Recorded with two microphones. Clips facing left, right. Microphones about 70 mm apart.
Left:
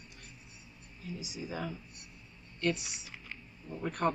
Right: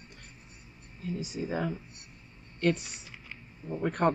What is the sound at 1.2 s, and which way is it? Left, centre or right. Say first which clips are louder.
Speech: right 6 dB; right.